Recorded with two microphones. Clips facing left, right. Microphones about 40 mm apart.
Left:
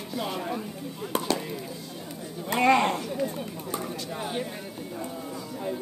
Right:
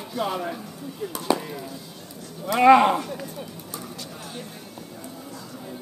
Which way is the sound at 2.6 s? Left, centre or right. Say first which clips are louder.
Right 7 dB; centre.